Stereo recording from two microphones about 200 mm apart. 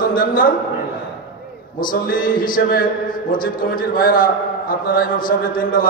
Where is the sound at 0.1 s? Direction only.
45° left (ahead or behind).